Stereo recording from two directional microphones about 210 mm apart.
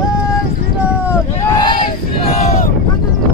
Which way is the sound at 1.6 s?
20° left (ahead or behind).